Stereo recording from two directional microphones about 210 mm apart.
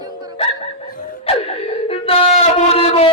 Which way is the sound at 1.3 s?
30° left (ahead or behind).